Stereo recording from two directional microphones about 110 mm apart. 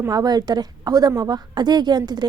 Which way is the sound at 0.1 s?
35° right (ahead or behind).